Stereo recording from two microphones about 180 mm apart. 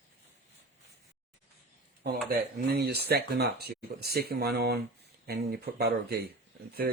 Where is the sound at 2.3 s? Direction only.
60° right (ahead or behind).